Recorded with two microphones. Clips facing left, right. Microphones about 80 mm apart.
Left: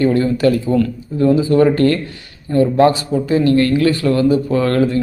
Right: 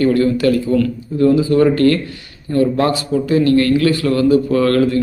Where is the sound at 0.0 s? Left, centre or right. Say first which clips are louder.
Even; left.